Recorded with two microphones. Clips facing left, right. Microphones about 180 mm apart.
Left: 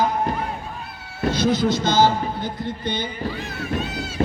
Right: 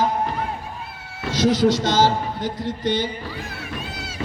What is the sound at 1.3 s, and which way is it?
A man's voice, 90° right.